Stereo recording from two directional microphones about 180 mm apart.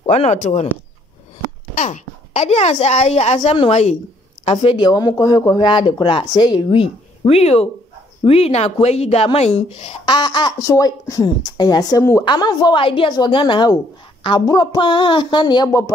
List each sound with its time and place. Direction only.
0.0 s a woman's voice: 35° left (ahead or behind)
1.8 s a woman's voice: 40° left (ahead or behind); by 15.8 s 20° left (ahead or behind)